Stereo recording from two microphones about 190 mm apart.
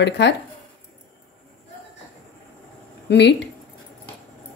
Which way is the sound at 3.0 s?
65° left (ahead or behind).